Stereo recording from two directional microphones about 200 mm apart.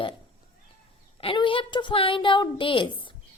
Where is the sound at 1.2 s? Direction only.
25° left (ahead or behind).